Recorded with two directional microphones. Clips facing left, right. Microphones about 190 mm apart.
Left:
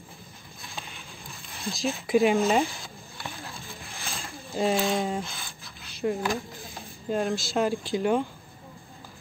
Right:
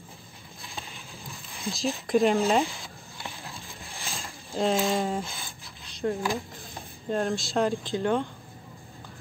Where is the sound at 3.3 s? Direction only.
15° right (ahead or behind).